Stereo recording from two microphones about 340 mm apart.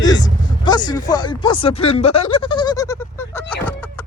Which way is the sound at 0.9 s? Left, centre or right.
Centre.